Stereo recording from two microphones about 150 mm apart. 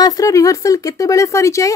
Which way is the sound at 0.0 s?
20° left (ahead or behind).